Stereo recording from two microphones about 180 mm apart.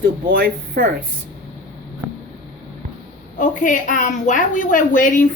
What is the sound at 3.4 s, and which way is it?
A woman's voice, 45° left (ahead or behind).